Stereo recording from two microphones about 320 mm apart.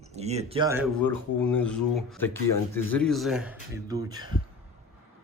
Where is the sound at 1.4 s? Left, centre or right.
Centre.